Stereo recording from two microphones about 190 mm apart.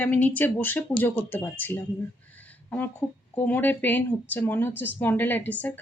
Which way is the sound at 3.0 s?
5° left (ahead or behind).